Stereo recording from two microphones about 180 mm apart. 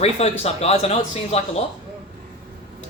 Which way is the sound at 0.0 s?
35° left (ahead or behind).